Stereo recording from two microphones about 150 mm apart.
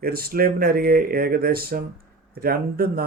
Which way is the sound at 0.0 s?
90° right.